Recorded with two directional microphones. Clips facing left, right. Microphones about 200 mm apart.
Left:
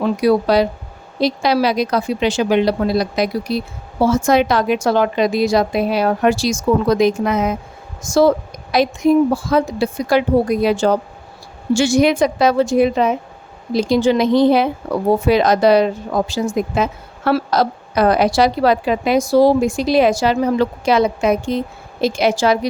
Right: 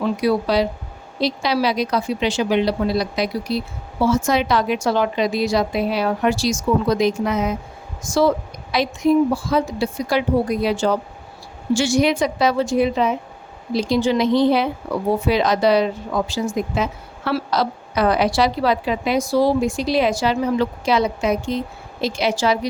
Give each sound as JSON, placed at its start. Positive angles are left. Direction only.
{"t": 0.0, "sound": "a woman's voice", "side_deg": 45}
{"t": 8.7, "sound": "a woman's voice", "side_deg": 45}